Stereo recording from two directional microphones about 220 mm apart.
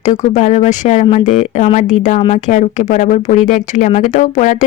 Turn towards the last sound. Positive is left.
turn(degrees=35)  # may be behind; listen again after turning